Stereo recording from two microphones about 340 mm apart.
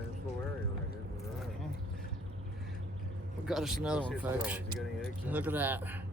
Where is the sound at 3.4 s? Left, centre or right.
Centre.